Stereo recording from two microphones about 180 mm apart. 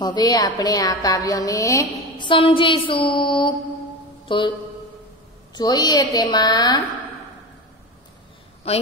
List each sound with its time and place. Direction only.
0.0 s a woman's voice: 20° left (ahead or behind)
5.5 s a woman's voice: 20° left (ahead or behind)
8.6 s a woman's voice: 35° left (ahead or behind)